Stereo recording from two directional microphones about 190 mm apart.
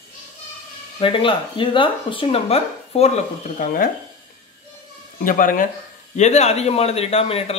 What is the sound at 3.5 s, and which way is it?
Speech, 45° left (ahead or behind).